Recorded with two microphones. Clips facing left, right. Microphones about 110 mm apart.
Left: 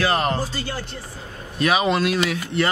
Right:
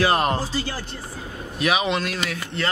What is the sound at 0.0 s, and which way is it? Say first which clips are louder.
Speech: right 1 dB; 15° right (ahead or behind).